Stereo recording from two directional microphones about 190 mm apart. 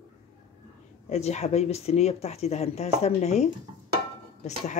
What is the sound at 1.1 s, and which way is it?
Dishes, 35° left (ahead or behind).